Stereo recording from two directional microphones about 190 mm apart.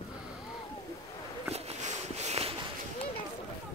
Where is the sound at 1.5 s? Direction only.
35° right (ahead or behind).